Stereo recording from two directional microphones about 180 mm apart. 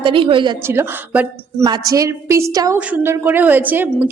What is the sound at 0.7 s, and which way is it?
A woman's voice, 10° right (ahead or behind).